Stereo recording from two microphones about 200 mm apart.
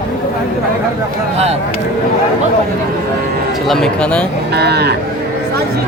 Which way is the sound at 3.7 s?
5° left (ahead or behind).